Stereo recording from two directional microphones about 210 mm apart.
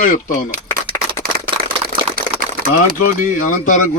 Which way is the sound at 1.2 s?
45° right (ahead or behind).